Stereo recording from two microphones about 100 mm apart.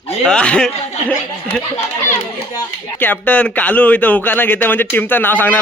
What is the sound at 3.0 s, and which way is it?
A man's voice, 15° left (ahead or behind).